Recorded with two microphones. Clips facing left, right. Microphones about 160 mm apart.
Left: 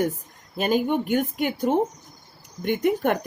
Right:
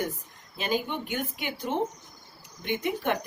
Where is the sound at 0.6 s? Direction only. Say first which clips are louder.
Left 8 dB; 50° left (ahead or behind).